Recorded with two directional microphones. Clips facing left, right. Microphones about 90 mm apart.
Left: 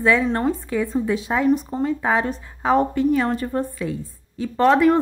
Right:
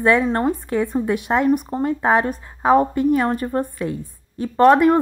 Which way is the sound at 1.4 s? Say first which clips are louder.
Right 1 dB; 45° right (ahead or behind).